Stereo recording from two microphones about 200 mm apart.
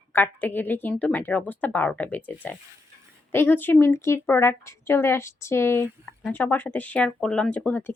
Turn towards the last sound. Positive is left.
turn(degrees=10)  # may be behind; listen again after turning